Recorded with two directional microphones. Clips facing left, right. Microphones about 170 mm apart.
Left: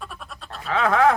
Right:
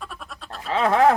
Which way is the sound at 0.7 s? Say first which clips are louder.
Right 1 dB; 30° right (ahead or behind).